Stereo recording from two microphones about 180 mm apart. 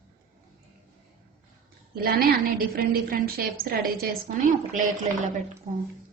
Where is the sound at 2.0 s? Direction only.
60° right (ahead or behind).